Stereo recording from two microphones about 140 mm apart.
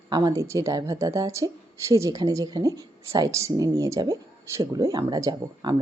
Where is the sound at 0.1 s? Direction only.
30° right (ahead or behind).